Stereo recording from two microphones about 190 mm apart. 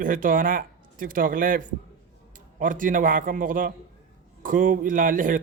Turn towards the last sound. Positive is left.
turn(degrees=-45)  # may be behind; listen again after turning